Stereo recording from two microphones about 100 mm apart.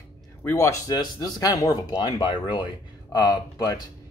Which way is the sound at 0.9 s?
40° left (ahead or behind).